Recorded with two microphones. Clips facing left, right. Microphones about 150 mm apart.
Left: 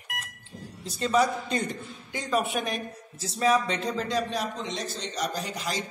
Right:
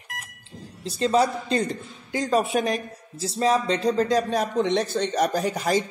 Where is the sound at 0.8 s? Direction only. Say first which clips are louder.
Right 3 dB; 30° right (ahead or behind).